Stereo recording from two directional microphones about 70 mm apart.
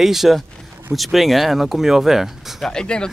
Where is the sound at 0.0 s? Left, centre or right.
Centre.